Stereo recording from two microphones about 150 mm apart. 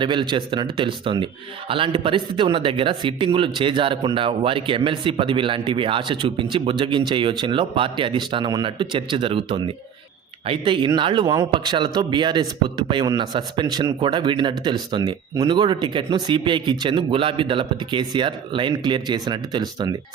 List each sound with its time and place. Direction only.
0.0 s speech: 30° right (ahead or behind)